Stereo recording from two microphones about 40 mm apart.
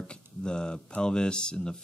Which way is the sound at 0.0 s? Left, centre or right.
Left.